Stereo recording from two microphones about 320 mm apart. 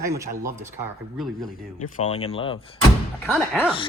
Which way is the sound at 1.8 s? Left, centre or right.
Left.